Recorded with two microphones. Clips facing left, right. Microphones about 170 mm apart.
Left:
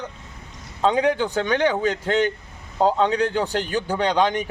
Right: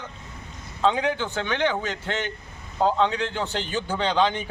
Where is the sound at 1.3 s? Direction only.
40° left (ahead or behind).